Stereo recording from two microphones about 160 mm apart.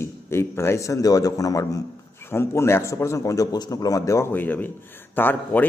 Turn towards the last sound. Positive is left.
turn(degrees=10)  # may be behind; listen again after turning